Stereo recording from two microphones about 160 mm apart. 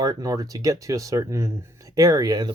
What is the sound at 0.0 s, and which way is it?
Speech, 25° right (ahead or behind).